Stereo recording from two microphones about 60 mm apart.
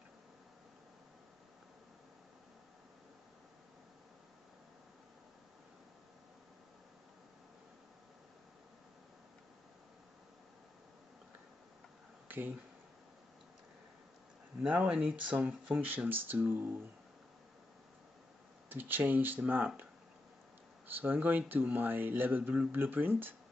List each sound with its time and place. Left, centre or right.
12.3 s speech: right
14.7 s speech: right
18.7 s speech: right
20.8 s speech: right